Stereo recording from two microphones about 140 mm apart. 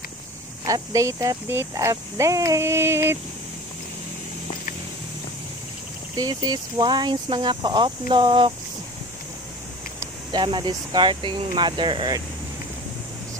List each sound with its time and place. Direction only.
0.7 s speech: 25° right (ahead or behind)
6.1 s speech: 30° right (ahead or behind)
10.3 s speech: 35° right (ahead or behind)